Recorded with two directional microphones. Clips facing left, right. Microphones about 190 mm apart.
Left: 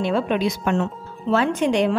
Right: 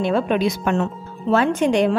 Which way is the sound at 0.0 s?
50° right (ahead or behind).